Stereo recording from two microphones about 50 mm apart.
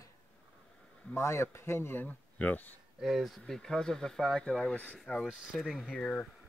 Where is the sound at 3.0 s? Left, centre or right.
Centre.